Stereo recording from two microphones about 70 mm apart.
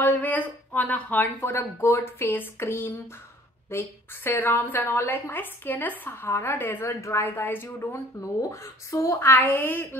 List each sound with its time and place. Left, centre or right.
0.0 s a woman's voice: left
7.2 s a woman's voice: left
8.4 s speech: left
9.3 s a woman's voice: left